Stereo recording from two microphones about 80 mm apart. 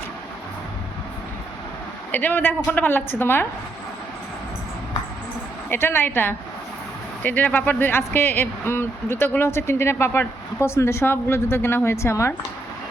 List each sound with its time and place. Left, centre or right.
2.1 s a woman's voice: left
5.6 s a woman's voice: left